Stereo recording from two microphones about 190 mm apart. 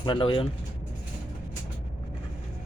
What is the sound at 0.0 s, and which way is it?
Speech, 25° left (ahead or behind).